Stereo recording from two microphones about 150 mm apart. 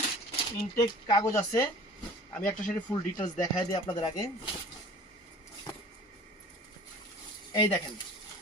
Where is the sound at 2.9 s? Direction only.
25° left (ahead or behind).